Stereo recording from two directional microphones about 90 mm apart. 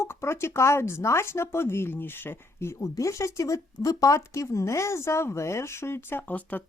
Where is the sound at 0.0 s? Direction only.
30° left (ahead or behind).